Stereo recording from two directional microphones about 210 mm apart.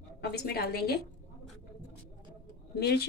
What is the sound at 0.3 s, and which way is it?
Speech, 50° left (ahead or behind).